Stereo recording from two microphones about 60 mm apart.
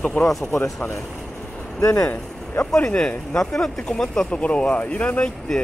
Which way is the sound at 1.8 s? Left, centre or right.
Left.